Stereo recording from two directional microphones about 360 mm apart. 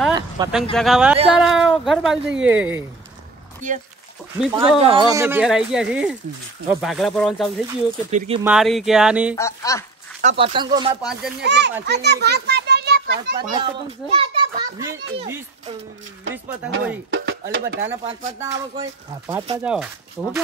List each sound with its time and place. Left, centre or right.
0.1 s speech: centre
4.5 s speech: centre
8.1 s speech: centre
8.5 s speech: centre
9.3 s speech: centre
10.2 s speech: centre
11.0 s speech: centre
11.4 s a child's voice: right
13.4 s speech: centre
17.1 s speech: right
18.0 s speech: centre